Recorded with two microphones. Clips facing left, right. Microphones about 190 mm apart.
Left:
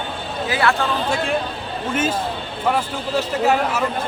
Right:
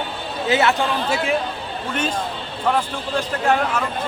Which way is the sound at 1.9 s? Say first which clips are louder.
Left 3 dB; 5° left (ahead or behind).